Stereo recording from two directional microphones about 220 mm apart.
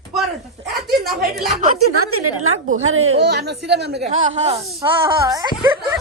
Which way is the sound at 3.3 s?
50° right (ahead or behind).